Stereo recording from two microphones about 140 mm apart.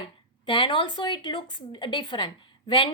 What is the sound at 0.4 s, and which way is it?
Speech, 35° left (ahead or behind).